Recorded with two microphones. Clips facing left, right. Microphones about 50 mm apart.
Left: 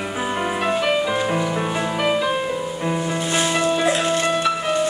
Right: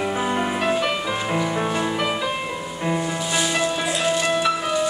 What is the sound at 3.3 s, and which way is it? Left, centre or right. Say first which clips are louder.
Music: left 3 dB; left.